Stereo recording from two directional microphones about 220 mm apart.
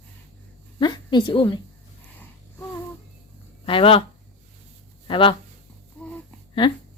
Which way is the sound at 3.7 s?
25° left (ahead or behind).